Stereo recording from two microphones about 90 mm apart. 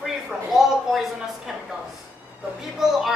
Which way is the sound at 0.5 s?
5° right (ahead or behind).